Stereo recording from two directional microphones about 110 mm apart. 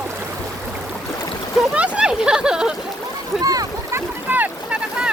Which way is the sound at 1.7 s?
10° right (ahead or behind).